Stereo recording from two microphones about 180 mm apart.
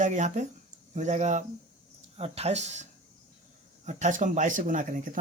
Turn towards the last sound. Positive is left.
turn(degrees=-45)  # may be behind; listen again after turning